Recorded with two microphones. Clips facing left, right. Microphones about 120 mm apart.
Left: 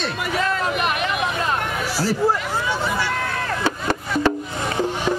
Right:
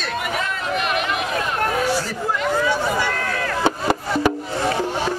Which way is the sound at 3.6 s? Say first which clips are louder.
Right 6 dB; 20° right (ahead or behind).